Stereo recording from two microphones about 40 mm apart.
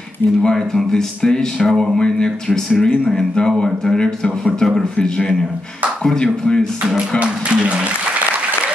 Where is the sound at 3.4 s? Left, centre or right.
Centre.